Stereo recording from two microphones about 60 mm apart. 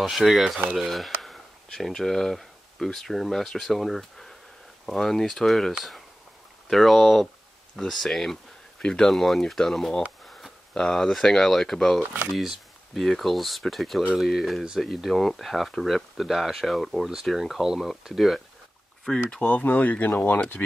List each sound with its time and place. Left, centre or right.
0.0 s speech: centre
19.0 s speech: centre
19.4 s speech: left